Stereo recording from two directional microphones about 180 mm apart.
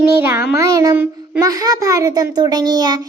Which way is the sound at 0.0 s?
15° right (ahead or behind).